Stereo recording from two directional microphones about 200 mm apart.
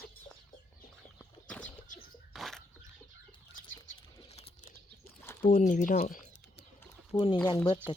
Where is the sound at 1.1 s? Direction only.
5° left (ahead or behind).